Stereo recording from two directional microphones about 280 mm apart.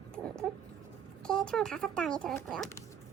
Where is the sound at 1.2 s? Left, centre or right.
Centre.